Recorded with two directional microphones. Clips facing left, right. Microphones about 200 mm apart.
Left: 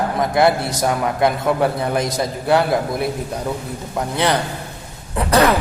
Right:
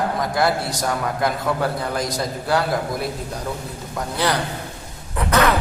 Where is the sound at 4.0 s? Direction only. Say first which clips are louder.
Left 5 dB; 25° left (ahead or behind).